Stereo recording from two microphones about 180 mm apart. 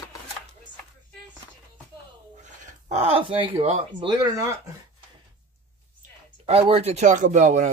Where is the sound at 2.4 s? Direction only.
40° right (ahead or behind).